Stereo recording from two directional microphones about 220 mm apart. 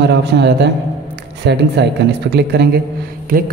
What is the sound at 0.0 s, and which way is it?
A man's voice, 50° right (ahead or behind).